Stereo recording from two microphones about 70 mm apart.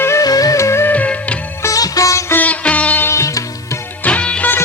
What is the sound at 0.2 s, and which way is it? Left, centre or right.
Music, left.